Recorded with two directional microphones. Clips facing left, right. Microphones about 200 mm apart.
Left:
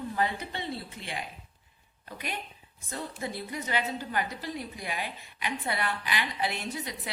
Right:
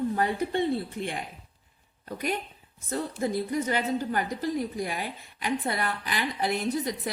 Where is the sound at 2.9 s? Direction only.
45° right (ahead or behind).